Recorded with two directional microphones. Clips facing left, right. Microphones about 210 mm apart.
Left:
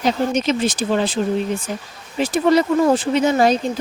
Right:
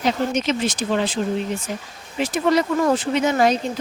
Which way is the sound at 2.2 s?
30° left (ahead or behind).